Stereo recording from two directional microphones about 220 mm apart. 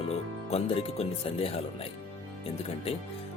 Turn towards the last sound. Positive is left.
turn(degrees=25)  # may be behind; listen again after turning